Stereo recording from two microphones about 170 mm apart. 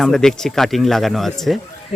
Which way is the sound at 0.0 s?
Centre (ahead or behind).